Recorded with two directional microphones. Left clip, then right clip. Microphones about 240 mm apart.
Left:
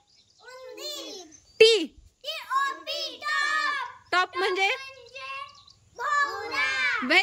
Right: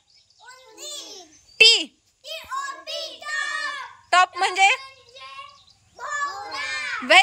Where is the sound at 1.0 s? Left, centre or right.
Centre.